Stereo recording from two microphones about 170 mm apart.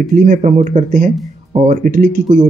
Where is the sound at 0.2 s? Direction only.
45° right (ahead or behind).